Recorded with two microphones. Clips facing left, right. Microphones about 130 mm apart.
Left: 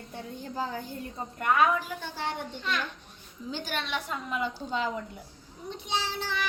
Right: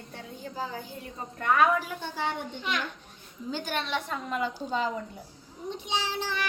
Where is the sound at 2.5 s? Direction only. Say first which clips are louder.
Even; 15° right (ahead or behind).